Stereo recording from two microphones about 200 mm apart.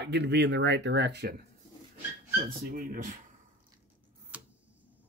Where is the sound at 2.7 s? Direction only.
45° right (ahead or behind).